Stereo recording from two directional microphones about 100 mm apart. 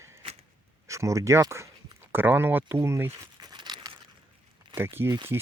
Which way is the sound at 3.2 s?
45° right (ahead or behind).